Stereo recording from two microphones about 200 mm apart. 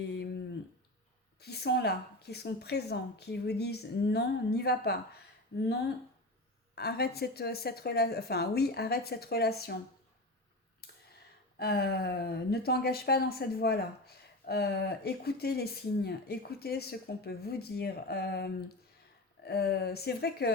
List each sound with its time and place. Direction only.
1.4 s a woman's voice: 55° left (ahead or behind)
6.7 s a woman's voice: 50° left (ahead or behind)
10.8 s a sound: 55° left (ahead or behind)
11.5 s a woman's voice: 50° left (ahead or behind)